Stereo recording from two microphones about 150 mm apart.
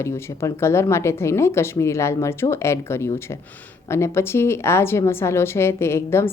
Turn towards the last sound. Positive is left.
turn(degrees=15)  # may be behind; listen again after turning